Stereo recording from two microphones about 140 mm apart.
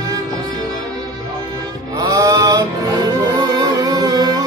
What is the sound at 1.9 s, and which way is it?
Music, 25° right (ahead or behind).